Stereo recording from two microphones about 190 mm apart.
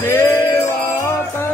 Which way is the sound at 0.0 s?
10° left (ahead or behind).